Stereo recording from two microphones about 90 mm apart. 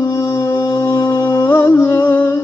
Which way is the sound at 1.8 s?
25° left (ahead or behind).